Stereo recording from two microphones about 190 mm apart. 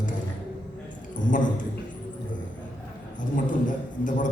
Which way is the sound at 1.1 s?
45° left (ahead or behind).